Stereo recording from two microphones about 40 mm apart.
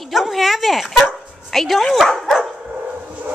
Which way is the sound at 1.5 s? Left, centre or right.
Centre.